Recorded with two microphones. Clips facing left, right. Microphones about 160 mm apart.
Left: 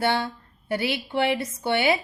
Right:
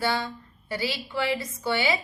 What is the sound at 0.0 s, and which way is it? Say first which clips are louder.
A woman's voice: left 3 dB; 60° left (ahead or behind).